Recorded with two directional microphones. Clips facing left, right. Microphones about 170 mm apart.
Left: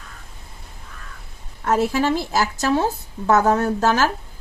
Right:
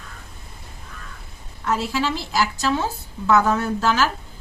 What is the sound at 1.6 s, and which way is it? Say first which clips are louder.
Speech: left 4 dB; 50° left (ahead or behind).